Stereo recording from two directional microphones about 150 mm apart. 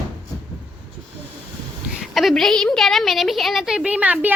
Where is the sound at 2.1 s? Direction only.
Centre (ahead or behind).